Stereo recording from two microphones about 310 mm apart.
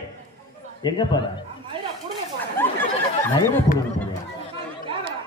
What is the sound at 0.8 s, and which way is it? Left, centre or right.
Speech, centre.